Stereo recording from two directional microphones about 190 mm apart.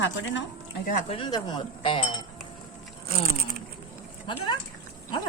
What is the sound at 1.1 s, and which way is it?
Speech, 25° left (ahead or behind).